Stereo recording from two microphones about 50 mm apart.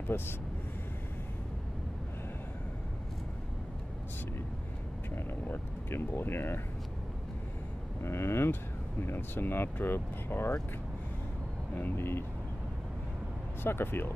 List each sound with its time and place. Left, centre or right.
0.1 s speech: left
5.1 s speech: left
8.0 s speech: left
9.0 s speech: left
11.7 s speech: left
13.7 s speech: left